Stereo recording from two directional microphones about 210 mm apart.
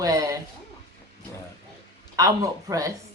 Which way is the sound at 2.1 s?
15° right (ahead or behind).